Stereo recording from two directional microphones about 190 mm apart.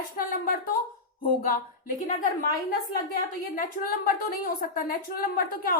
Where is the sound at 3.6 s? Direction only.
50° left (ahead or behind).